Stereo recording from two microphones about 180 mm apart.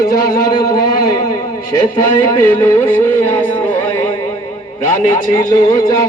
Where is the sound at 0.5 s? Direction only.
20° left (ahead or behind).